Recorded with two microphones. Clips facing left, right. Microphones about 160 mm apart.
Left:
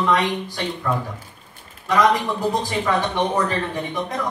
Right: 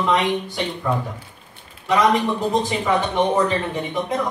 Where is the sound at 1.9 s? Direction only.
20° right (ahead or behind).